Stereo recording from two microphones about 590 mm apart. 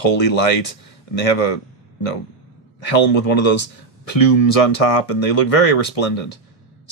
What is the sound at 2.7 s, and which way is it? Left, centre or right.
Speech, left.